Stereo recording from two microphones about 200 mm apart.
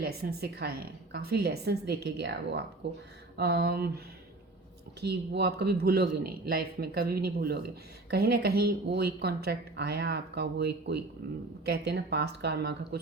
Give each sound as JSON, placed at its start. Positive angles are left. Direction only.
{"t": 0.0, "sound": "a woman's voice", "side_deg": -50}